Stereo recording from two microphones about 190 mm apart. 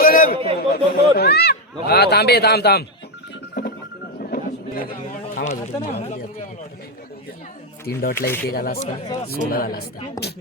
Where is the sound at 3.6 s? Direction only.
55° left (ahead or behind).